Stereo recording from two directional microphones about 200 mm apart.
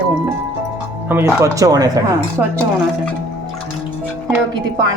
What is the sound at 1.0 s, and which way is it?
Speech, 10° right (ahead or behind).